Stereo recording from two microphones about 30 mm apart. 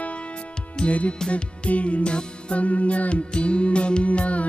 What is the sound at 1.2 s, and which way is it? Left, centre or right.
Music, left.